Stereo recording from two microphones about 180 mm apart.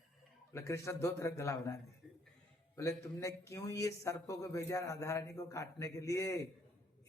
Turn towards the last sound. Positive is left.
turn(degrees=15)  # may be behind; listen again after turning